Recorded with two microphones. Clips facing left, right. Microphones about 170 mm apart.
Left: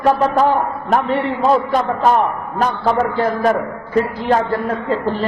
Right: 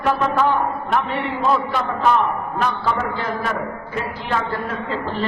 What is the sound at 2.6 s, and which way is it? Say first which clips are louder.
A man's voice: left 7 dB; 40° left (ahead or behind).